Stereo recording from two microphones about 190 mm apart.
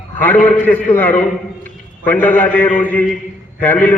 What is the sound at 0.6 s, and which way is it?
A man's voice, 10° left (ahead or behind).